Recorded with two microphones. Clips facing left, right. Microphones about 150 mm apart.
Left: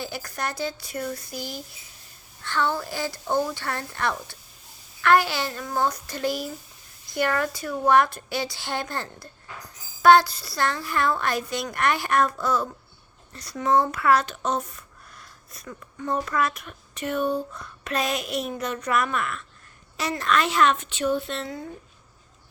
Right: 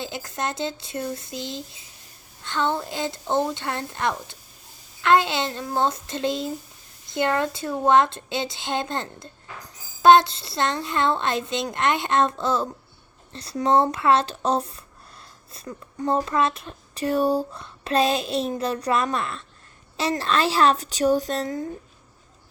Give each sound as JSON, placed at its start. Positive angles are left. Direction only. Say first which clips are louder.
{"t": 0.0, "sound": "speech", "louder": "right 2 dB", "side_deg": -20}